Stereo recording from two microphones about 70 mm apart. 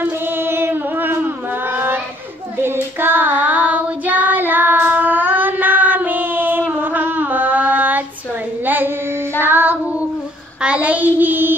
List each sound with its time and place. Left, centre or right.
0.0 s a sound: right
2.6 s child singing: right
8.6 s female singing: right
9.4 s child singing: right
10.6 s child singing: centre